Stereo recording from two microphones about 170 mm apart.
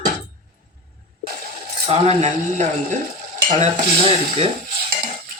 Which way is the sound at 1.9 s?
40° right (ahead or behind).